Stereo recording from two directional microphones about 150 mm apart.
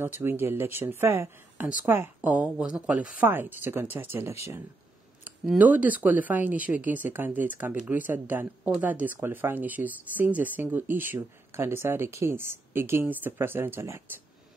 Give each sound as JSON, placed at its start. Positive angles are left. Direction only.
{"t": 0.0, "sound": "speech", "side_deg": -15}